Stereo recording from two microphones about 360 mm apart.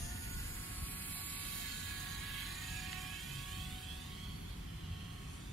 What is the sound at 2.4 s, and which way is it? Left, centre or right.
Vehicle, centre.